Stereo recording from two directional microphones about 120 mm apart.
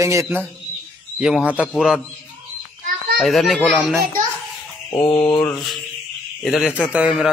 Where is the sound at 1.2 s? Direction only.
5° right (ahead or behind).